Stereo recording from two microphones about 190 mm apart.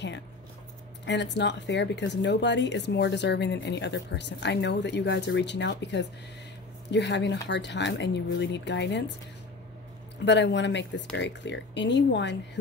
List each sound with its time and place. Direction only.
1.0 s speech: 65° left (ahead or behind)
10.2 s speech: 65° left (ahead or behind)